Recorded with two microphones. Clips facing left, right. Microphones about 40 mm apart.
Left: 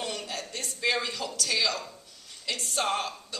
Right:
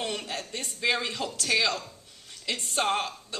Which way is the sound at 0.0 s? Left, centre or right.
Right.